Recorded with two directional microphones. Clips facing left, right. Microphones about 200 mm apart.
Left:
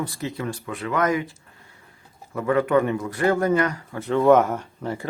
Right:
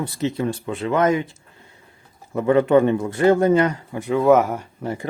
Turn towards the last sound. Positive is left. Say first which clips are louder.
# right 1 dB
turn(degrees=-15)  # may be behind; listen again after turning